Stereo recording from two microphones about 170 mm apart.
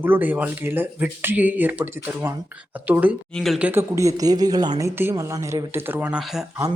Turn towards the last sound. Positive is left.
turn(degrees=-5)  # may be behind; listen again after turning